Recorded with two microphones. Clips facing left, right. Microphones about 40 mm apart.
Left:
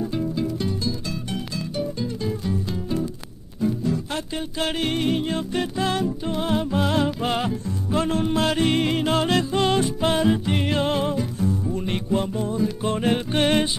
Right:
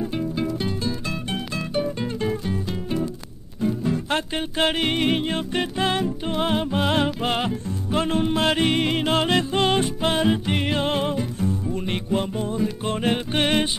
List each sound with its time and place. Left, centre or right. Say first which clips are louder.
0.2 s music: even; right
0.7 s music: right 1 dB; right
13.3 s music: left 1 dB; right